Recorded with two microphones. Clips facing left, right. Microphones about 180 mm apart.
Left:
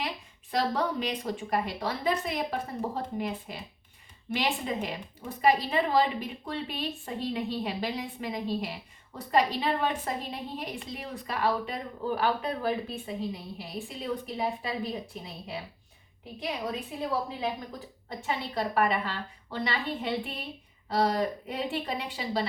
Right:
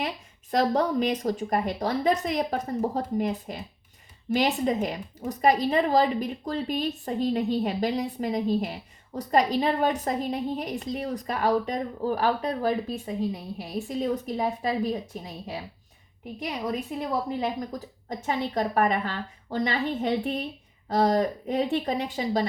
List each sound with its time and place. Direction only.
0.5 s a woman's voice: 40° right (ahead or behind)
17.4 s speech: 40° right (ahead or behind)